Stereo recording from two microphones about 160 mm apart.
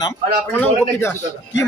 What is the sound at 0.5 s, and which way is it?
Speech, 15° left (ahead or behind).